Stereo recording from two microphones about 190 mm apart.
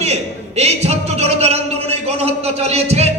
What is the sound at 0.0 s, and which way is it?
A man's voice, 35° right (ahead or behind).